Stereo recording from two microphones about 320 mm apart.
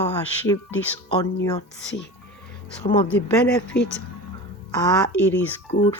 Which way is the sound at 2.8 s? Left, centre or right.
Centre.